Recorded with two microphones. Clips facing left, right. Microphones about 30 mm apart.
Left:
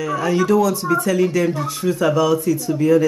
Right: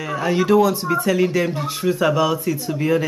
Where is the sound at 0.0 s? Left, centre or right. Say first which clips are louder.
Left 1 dB; right.